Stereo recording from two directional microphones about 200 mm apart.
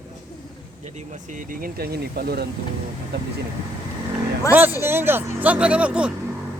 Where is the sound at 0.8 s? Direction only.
35° right (ahead or behind); by 2.4 s 50° right (ahead or behind).